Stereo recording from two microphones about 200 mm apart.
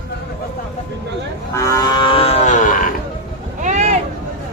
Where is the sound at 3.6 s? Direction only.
35° right (ahead or behind).